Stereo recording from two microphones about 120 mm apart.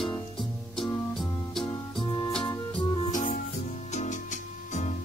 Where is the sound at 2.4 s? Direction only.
40° left (ahead or behind).